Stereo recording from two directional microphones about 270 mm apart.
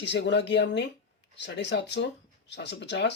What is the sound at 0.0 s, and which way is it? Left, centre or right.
Speech, left.